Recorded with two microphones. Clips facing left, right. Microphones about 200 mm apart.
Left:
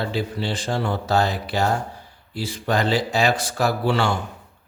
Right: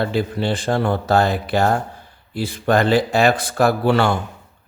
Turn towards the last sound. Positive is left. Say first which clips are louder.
# right 5 dB
turn(degrees=-55)  # may be behind; listen again after turning